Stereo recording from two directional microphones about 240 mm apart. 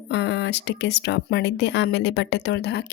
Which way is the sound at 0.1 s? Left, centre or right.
Left.